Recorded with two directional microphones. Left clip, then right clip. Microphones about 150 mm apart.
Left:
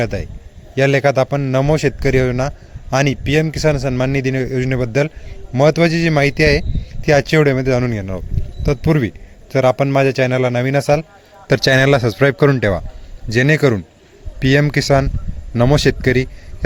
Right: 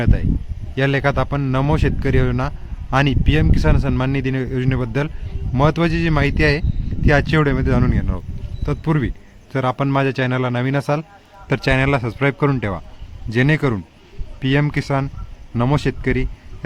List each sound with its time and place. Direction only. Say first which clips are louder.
0.0 s a man's voice: left 3 dB; 10° left (ahead or behind)
11.4 s a man's voice: left 6 dB; 20° left (ahead or behind)